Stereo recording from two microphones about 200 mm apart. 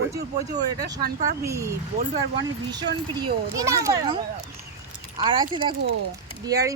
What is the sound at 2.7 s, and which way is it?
A child's voice, 20° right (ahead or behind).